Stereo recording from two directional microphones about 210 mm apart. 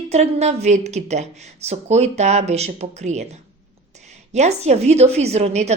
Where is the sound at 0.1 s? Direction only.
30° right (ahead or behind).